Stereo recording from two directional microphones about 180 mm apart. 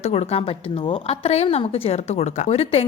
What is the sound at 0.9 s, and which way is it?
Speech, 35° left (ahead or behind).